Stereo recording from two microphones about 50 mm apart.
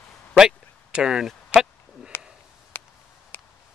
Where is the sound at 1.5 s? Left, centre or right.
Left.